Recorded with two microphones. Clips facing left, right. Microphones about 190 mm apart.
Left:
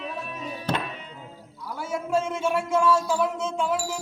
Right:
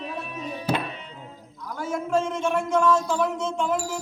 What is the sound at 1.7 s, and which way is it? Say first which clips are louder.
A man's voice: right 1 dB; 5° left (ahead or behind).